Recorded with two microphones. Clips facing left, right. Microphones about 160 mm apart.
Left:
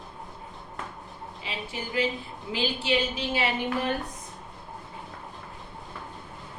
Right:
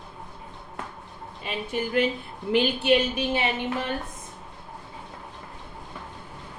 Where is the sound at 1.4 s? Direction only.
55° right (ahead or behind).